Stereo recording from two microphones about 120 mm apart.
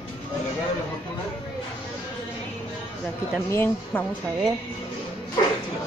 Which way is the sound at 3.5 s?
15° left (ahead or behind).